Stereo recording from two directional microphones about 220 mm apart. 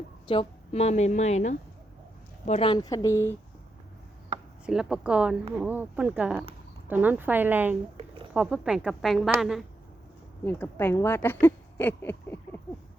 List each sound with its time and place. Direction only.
0.3 s a woman's voice: 25° left (ahead or behind)
4.6 s a woman's voice: 5° right (ahead or behind)
10.4 s a woman's voice: 10° left (ahead or behind)